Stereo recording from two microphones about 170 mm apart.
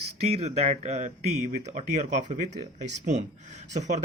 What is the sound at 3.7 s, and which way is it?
Speech, 45° right (ahead or behind).